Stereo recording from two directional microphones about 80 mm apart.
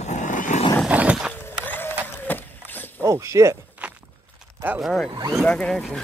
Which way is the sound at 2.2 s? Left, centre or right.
Left.